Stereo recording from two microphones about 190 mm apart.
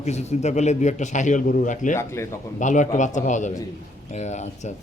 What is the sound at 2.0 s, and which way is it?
Speech, 15° left (ahead or behind).